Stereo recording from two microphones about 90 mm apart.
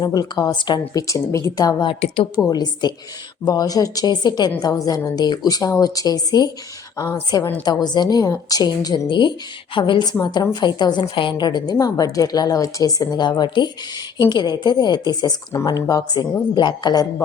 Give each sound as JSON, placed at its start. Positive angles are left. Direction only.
{"t": 0.0, "sound": "a woman's voice", "side_deg": 45}
{"t": 0.9, "sound": "a woman's voice", "side_deg": 35}
{"t": 9.0, "sound": "a woman's voice", "side_deg": 60}
{"t": 16.6, "sound": "a woman's voice", "side_deg": 55}